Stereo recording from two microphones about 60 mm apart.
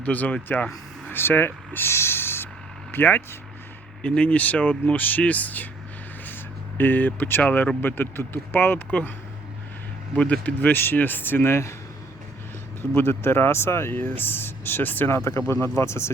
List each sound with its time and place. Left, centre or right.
0.0 s speech: left
4.0 s speech: centre
6.2 s a sound: left
7.4 s speech: left
10.4 s speech: left
13.0 s speech: left
15.1 s speech: left